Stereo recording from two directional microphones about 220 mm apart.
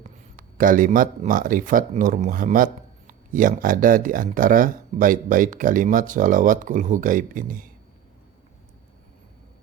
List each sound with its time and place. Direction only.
0.0 s speech: 40° right (ahead or behind)